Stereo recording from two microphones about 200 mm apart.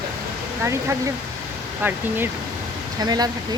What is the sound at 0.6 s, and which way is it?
Speech, 15° right (ahead or behind).